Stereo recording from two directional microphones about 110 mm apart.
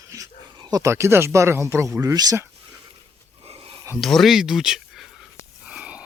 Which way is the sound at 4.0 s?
Centre (ahead or behind).